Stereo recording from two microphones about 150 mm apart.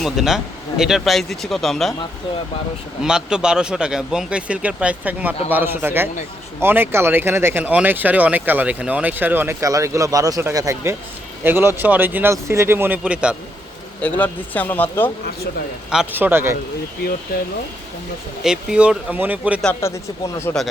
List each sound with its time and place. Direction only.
0.0 s speech: 5° right (ahead or behind)
3.0 s speech: 5° right (ahead or behind)
14.0 s a man's voice: 10° left (ahead or behind)
15.9 s speech: 10° right (ahead or behind)
17.3 s speech: 90° left
18.4 s speech: 5° right (ahead or behind)
19.8 s a man's voice: 15° left (ahead or behind)